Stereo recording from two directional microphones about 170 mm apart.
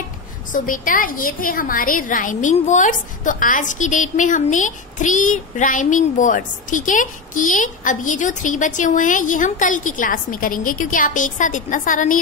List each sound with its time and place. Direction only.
0.5 s a woman's voice: 55° left (ahead or behind)